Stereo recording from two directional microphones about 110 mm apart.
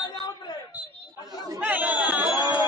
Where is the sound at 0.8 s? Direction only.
15° right (ahead or behind).